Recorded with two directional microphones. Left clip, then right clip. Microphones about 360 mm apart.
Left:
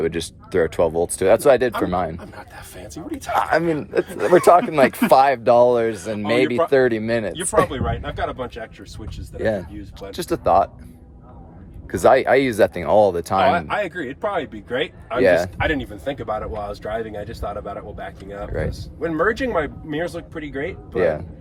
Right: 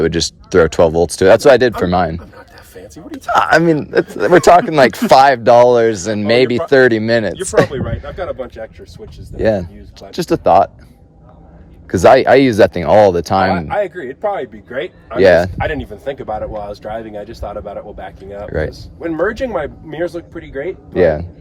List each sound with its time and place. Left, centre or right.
0.0 s a man's voice: right
9.4 s a man's voice: centre
11.9 s a man's voice: right
15.2 s a man's voice: right